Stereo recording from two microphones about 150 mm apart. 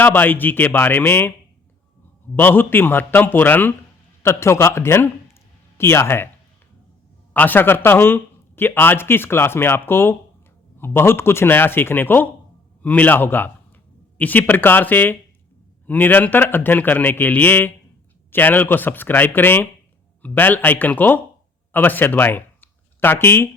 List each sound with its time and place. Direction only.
0.0 s a man's voice: 10° left (ahead or behind)
2.3 s a man's voice: 15° left (ahead or behind)
7.3 s a man's voice: 10° left (ahead or behind)